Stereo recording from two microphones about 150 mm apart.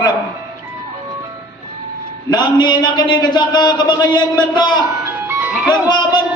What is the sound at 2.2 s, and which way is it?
A man's voice, 30° left (ahead or behind).